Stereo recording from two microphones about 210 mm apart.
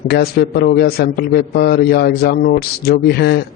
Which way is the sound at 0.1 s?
45° left (ahead or behind).